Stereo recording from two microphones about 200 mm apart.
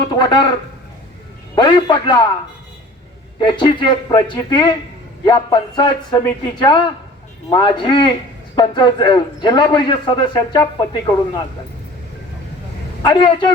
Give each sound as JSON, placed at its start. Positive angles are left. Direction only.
{"t": 0.1, "sound": "a man's voice", "side_deg": 20}
{"t": 1.5, "sound": "a man's voice", "side_deg": 25}
{"t": 3.3, "sound": "a man's voice", "side_deg": 25}
{"t": 13.0, "sound": "a man's voice", "side_deg": 20}